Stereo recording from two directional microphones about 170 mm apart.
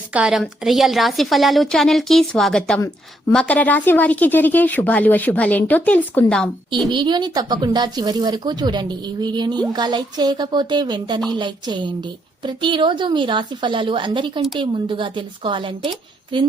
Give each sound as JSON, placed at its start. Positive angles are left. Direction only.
{"t": 0.1, "sound": "a woman's voice", "side_deg": -5}
{"t": 6.9, "sound": "speech", "side_deg": -25}